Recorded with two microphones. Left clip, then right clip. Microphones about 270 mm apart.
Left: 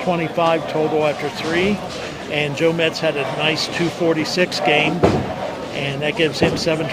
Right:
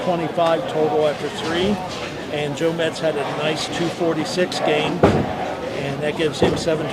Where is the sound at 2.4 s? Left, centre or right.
Left.